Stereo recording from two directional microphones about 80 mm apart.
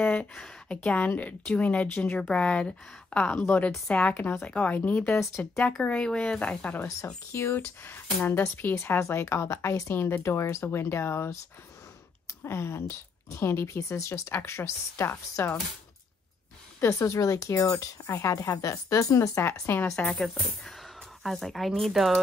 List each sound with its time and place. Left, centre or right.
0.8 s a woman's voice: centre
3.3 s speech: left
3.8 s a woman's voice: centre
4.1 s speech: left
5.1 s speech: left
5.8 s a woman's voice: centre
7.0 s speech: left
9.0 s speech: left
12.4 s speech: left
17.0 s speech: left
20.0 s a woman's voice: centre